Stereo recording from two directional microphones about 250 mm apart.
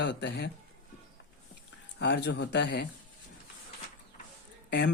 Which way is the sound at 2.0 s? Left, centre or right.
Left.